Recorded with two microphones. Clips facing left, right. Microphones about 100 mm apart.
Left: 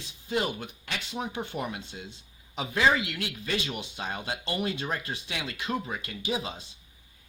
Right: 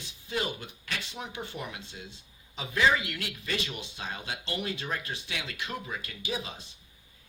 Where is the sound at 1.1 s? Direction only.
35° left (ahead or behind).